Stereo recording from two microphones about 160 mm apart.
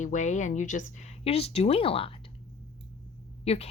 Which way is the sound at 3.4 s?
40° left (ahead or behind).